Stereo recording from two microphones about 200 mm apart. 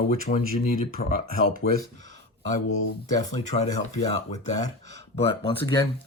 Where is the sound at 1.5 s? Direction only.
50° right (ahead or behind).